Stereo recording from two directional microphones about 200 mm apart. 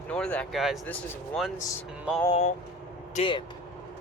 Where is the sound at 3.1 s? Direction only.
25° left (ahead or behind).